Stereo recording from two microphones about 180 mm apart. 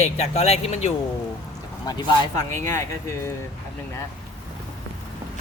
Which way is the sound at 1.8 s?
20° left (ahead or behind).